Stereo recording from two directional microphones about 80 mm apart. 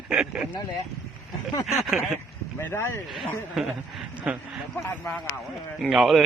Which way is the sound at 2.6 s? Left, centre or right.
Left.